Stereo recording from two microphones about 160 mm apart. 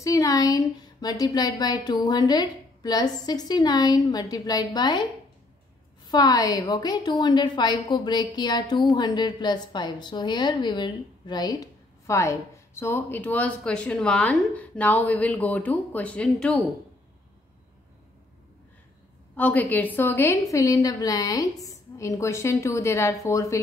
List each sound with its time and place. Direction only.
0.0 s a woman's voice: 20° left (ahead or behind)
6.0 s a woman's voice: 25° left (ahead or behind); by 16.6 s 5° left (ahead or behind)
19.3 s a woman's voice: 10° left (ahead or behind)